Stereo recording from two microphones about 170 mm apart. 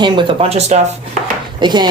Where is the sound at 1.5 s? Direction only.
25° right (ahead or behind).